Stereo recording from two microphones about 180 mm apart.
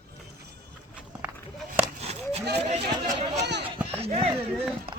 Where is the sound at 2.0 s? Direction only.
35° right (ahead or behind).